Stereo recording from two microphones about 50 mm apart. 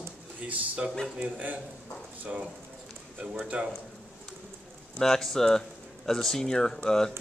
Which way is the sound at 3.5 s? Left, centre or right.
Right.